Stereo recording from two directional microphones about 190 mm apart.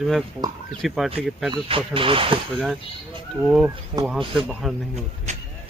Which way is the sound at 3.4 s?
Centre (ahead or behind).